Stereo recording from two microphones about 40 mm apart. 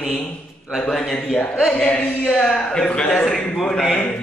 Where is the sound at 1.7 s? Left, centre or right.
Left.